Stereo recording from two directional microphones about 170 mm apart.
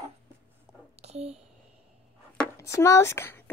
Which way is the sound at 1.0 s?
40° right (ahead or behind).